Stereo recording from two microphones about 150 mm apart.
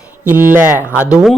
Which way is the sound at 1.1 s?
5° right (ahead or behind).